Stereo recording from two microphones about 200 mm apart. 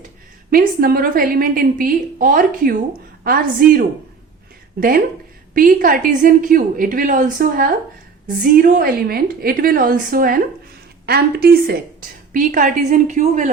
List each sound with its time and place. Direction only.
0.5 s a woman's voice: 45° right (ahead or behind)